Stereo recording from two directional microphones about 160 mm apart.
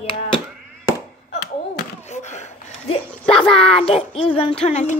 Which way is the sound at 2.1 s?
50° left (ahead or behind).